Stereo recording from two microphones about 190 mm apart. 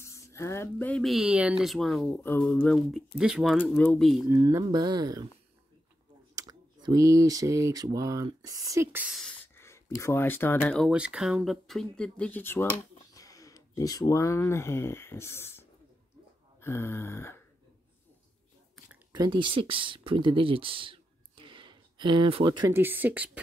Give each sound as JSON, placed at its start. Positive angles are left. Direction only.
{"t": 0.0, "sound": "speech", "side_deg": 15}
{"t": 2.2, "sound": "a sound", "side_deg": 10}
{"t": 3.2, "sound": "speech", "side_deg": -5}
{"t": 4.3, "sound": "speech", "side_deg": -15}
{"t": 6.3, "sound": "speech", "side_deg": -20}
{"t": 10.9, "sound": "speech", "side_deg": -5}
{"t": 16.5, "sound": "a sound", "side_deg": 15}
{"t": 19.1, "sound": "speech", "side_deg": -25}
{"t": 22.7, "sound": "speech", "side_deg": -10}